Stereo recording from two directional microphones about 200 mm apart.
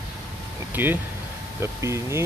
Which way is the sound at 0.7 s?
10° right (ahead or behind).